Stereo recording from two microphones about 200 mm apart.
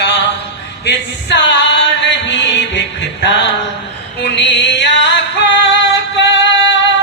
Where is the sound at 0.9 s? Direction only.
60° left (ahead or behind).